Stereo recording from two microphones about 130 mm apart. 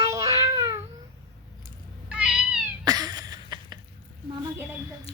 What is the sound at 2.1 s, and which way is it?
Cat, 10° right (ahead or behind).